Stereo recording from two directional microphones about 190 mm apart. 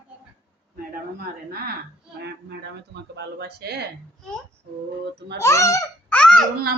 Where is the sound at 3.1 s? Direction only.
60° right (ahead or behind).